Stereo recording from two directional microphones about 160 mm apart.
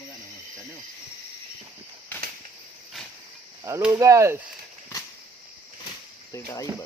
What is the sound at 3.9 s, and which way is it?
Speech, 20° right (ahead or behind).